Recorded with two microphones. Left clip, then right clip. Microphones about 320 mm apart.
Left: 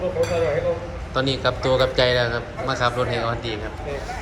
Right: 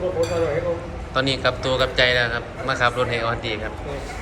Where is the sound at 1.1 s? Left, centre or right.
Centre.